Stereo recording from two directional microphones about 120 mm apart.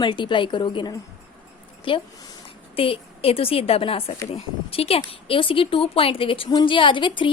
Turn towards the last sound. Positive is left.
turn(degrees=40)  # may be behind; listen again after turning